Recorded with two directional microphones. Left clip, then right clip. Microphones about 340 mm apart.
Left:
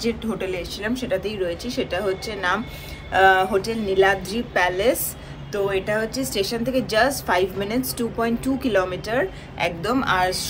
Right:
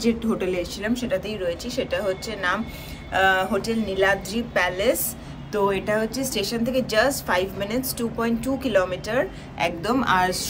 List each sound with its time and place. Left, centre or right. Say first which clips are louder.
0.0 s a woman's voice: right 2 dB; centre